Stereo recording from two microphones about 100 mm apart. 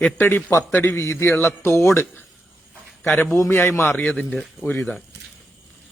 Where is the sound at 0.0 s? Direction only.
20° left (ahead or behind).